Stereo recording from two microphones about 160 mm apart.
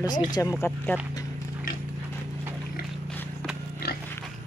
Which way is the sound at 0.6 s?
10° left (ahead or behind).